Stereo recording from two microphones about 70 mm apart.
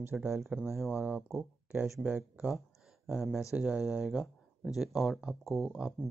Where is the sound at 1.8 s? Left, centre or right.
Centre.